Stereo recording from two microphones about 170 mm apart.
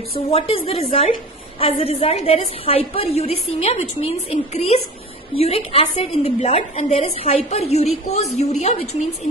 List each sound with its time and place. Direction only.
0.3 s a woman's voice: 35° left (ahead or behind)